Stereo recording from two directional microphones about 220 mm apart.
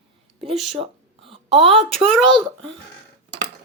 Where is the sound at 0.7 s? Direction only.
25° right (ahead or behind).